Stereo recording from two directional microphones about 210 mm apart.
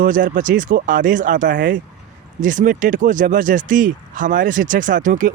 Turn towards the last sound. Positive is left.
turn(degrees=-40)  # may be behind; listen again after turning